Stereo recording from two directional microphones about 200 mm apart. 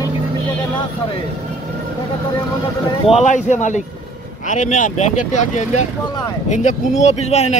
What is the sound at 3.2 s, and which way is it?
Speech, 35° left (ahead or behind).